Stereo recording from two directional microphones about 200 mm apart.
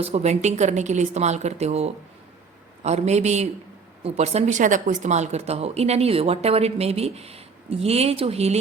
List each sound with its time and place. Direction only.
0.0 s speech: 35° right (ahead or behind)